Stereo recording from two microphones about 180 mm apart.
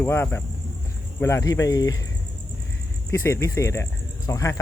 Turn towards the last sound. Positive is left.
turn(degrees=20)  # may be behind; listen again after turning